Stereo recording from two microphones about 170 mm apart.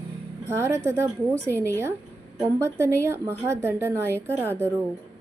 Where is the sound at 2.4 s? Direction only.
15° right (ahead or behind).